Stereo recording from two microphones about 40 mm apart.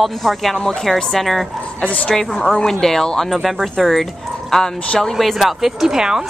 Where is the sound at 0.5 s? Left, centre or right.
Centre.